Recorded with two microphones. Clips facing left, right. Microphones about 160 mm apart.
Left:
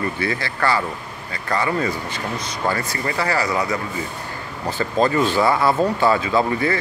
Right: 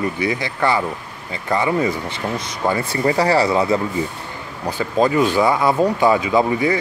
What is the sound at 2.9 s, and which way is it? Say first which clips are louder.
Speech: right 6 dB; 30° right (ahead or behind).